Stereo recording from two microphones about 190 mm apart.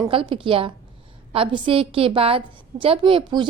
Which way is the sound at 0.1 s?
30° right (ahead or behind).